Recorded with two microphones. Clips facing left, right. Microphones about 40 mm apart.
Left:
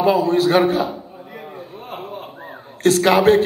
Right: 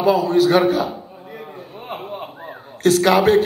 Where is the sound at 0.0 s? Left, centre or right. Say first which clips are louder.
Even; left.